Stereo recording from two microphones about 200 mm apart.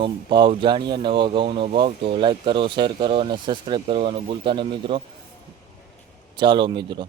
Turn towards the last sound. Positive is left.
turn(degrees=-25)  # may be behind; listen again after turning